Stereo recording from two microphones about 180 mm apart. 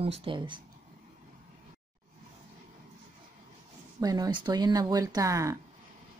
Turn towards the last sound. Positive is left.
turn(degrees=-20)  # may be behind; listen again after turning